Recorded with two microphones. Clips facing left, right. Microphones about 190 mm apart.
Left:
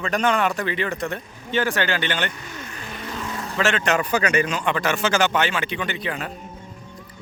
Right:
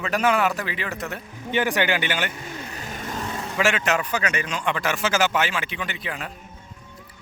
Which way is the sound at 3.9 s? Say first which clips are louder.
Left 5 dB; 45° left (ahead or behind).